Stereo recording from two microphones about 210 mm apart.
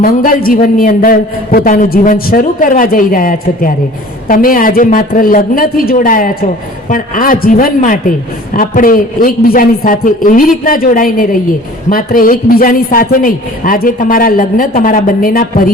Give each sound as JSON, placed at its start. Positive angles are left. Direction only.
{"t": 0.0, "sound": "a man's voice", "side_deg": 40}